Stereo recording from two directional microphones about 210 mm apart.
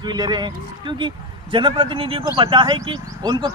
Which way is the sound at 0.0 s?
20° right (ahead or behind).